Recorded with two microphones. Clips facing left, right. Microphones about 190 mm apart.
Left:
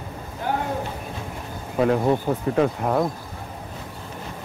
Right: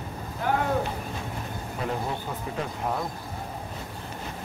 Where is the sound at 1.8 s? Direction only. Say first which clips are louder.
Left 12 dB; 70° left (ahead or behind).